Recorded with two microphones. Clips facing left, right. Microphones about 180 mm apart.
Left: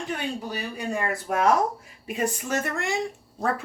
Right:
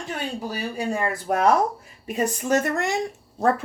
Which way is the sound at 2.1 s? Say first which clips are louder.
Right 5 dB; 40° right (ahead or behind).